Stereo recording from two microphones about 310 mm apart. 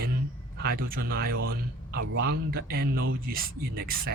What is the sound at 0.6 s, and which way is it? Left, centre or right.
Speech, right.